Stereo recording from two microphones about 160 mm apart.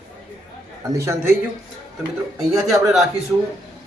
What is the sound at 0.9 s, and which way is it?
Speech, 20° right (ahead or behind).